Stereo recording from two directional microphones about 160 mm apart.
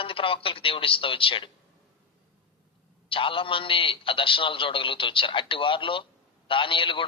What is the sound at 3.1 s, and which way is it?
A man's voice, 35° left (ahead or behind).